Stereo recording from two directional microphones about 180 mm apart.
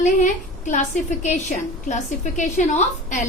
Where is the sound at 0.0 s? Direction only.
40° left (ahead or behind).